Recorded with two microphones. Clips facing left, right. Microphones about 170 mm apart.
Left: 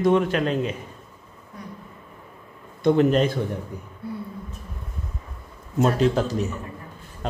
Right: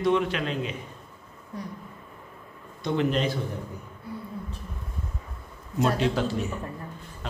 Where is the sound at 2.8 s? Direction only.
50° left (ahead or behind).